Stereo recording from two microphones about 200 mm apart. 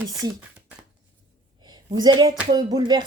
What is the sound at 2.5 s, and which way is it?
Speech, 20° right (ahead or behind).